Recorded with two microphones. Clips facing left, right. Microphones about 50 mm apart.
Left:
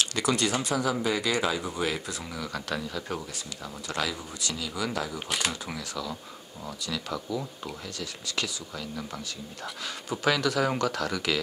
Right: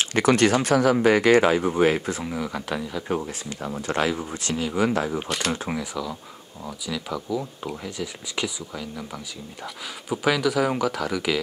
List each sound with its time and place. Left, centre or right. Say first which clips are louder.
0.0 s a sound: right 6 dB; right
0.3 s speech: right 9 dB; right
2.2 s speech: right 6 dB; centre
3.2 s speech: right 7 dB; right
6.6 s speech: right 3 dB; centre